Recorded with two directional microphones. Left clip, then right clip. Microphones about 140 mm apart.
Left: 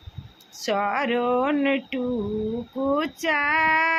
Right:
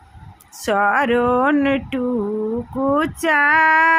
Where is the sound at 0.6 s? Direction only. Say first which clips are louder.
Right 7 dB; 35° right (ahead or behind).